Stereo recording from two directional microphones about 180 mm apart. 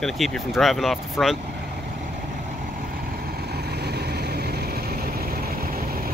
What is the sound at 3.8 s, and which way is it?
Vehicle, 65° right (ahead or behind).